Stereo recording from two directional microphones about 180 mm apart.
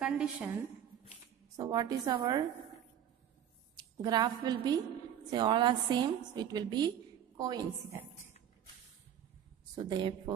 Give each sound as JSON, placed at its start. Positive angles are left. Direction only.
{"t": 0.0, "sound": "a woman's voice", "side_deg": -5}
{"t": 1.6, "sound": "a woman's voice", "side_deg": -20}
{"t": 3.7, "sound": "a woman's voice", "side_deg": -25}
{"t": 9.8, "sound": "a woman's voice", "side_deg": -25}